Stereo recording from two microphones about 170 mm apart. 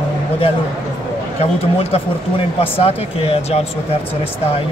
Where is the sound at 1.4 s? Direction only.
35° left (ahead or behind).